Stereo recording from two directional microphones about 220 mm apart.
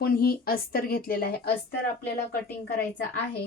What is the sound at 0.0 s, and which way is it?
A woman's voice, 45° left (ahead or behind).